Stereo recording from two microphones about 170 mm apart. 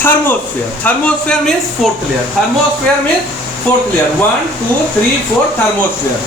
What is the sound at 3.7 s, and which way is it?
Speech, 10° left (ahead or behind).